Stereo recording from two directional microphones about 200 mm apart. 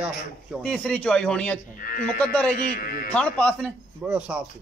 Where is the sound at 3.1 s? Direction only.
5° left (ahead or behind).